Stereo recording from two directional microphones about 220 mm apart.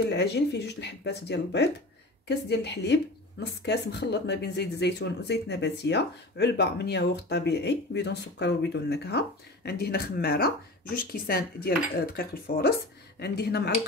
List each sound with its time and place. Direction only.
0.1 s speech: 50° left (ahead or behind)